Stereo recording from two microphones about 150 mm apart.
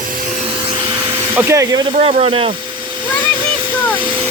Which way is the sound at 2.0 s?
45° right (ahead or behind).